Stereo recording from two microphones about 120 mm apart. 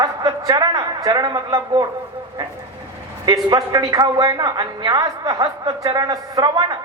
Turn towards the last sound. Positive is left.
turn(degrees=-35)  # may be behind; listen again after turning